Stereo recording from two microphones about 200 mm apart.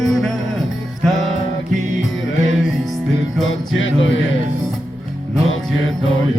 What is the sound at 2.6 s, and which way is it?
Music, centre (ahead or behind).